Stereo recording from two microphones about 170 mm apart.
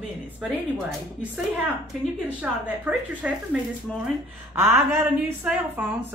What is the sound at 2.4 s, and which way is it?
A woman's voice, 10° right (ahead or behind).